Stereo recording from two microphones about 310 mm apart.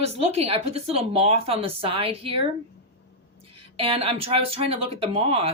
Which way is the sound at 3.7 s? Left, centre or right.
Centre.